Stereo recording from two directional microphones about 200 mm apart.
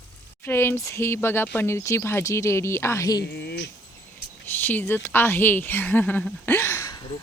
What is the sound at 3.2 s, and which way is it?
Speech, 55° left (ahead or behind).